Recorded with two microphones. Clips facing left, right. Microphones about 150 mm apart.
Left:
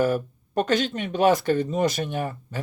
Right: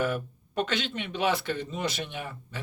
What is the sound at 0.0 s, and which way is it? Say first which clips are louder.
Speech: left 6 dB; 40° left (ahead or behind).